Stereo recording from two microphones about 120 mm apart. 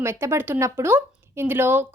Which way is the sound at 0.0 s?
20° right (ahead or behind).